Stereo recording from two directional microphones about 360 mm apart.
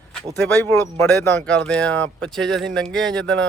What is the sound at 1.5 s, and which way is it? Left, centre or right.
Speech, centre.